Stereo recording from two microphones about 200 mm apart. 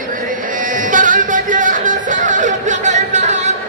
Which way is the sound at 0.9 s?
40° right (ahead or behind).